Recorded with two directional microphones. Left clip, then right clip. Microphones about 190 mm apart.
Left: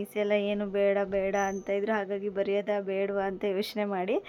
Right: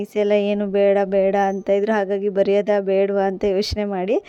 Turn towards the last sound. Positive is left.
turn(degrees=-40)  # may be behind; listen again after turning